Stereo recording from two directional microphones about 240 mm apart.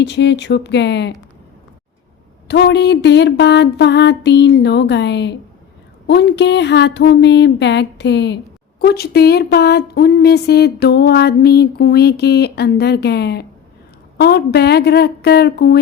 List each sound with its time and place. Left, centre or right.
0.0 s speech: left
2.5 s speech: left